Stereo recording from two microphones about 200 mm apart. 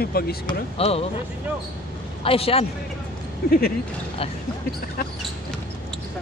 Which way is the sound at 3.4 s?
50° left (ahead or behind).